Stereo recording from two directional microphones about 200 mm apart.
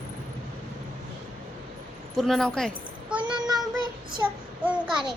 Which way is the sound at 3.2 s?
20° right (ahead or behind).